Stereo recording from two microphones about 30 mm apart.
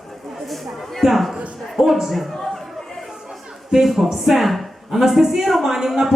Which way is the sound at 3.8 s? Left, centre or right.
Centre.